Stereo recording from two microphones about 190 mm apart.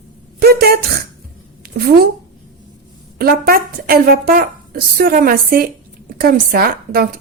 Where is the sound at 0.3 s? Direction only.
55° right (ahead or behind).